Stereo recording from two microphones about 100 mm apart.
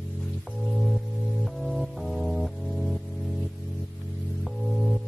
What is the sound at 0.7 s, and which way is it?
Music, centre (ahead or behind).